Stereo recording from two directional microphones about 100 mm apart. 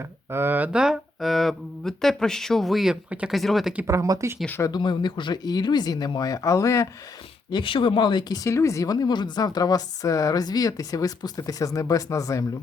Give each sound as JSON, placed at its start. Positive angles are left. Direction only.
{"t": 0.3, "sound": "speech", "side_deg": -25}
{"t": 3.8, "sound": "speech", "side_deg": -35}
{"t": 4.7, "sound": "speech", "side_deg": 50}
{"t": 7.5, "sound": "speech", "side_deg": 60}
{"t": 8.4, "sound": "a woman's voice", "side_deg": 30}